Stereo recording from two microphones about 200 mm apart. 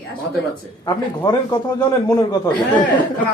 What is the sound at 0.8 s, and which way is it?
A man's voice, 20° left (ahead or behind).